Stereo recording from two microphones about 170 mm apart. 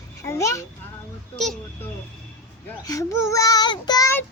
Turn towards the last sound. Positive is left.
turn(degrees=15)  # may be behind; listen again after turning